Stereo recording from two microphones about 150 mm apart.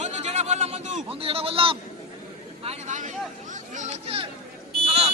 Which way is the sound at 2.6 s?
50° right (ahead or behind).